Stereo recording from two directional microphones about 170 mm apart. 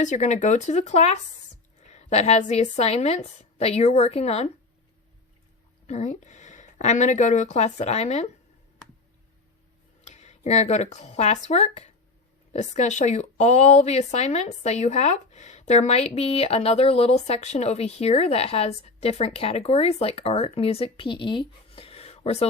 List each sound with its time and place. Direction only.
0.0 s speech: 45° left (ahead or behind)
5.9 s speech: 45° left (ahead or behind)
10.0 s speech: 40° left (ahead or behind)